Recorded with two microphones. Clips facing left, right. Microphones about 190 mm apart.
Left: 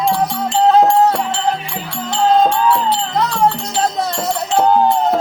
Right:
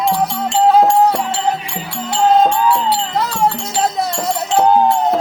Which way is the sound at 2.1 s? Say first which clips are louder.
Right 1 dB; 10° right (ahead or behind).